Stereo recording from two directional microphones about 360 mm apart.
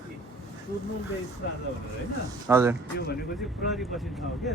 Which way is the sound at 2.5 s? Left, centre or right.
Centre.